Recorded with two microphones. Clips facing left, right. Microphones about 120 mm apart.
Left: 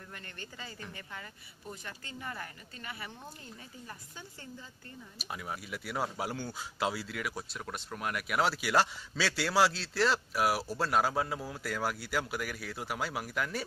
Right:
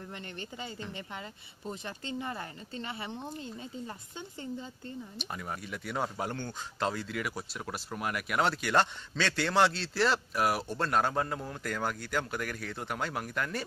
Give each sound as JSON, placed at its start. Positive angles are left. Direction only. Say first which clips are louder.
{"t": 0.1, "sound": "speech", "louder": "right 5 dB", "side_deg": -25}
{"t": 5.2, "sound": "speech", "louder": "left 1 dB", "side_deg": 5}